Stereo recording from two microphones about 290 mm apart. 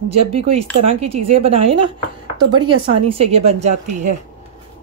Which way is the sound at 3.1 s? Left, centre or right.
Right.